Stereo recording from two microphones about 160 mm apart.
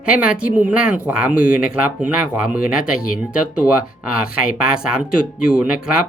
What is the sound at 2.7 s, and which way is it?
Speech, 60° left (ahead or behind).